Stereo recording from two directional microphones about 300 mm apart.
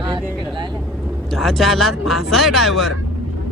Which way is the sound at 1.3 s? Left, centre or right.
Centre.